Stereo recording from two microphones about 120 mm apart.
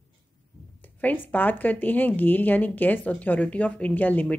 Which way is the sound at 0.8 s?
15° left (ahead or behind).